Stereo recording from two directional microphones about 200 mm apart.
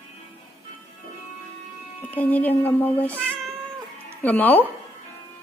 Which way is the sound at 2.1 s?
10° left (ahead or behind).